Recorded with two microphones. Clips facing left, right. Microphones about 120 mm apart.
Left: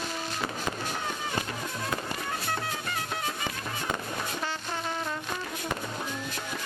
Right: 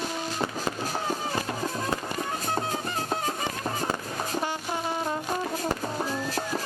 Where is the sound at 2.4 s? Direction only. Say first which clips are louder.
Right 4 dB; 30° right (ahead or behind).